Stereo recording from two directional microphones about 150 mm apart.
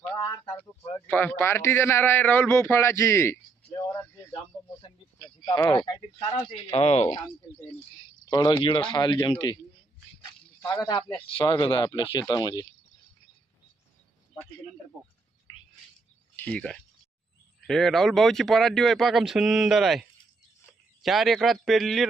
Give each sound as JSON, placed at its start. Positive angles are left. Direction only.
{"t": 0.1, "sound": "a sound", "side_deg": 15}
{"t": 1.0, "sound": "a man's voice", "side_deg": 10}
{"t": 6.7, "sound": "speech", "side_deg": 45}
{"t": 8.3, "sound": "speech", "side_deg": 30}
{"t": 10.6, "sound": "speech", "side_deg": 15}
{"t": 11.1, "sound": "speech", "side_deg": 35}
{"t": 16.3, "sound": "speech", "side_deg": 10}